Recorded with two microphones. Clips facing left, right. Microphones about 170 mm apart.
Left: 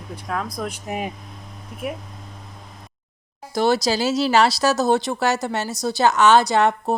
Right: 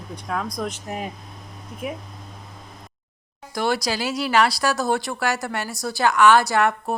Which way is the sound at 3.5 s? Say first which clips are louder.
Left 4 dB; 25° left (ahead or behind).